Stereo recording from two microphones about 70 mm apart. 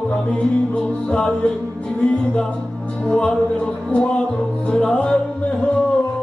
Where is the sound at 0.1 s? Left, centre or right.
Centre.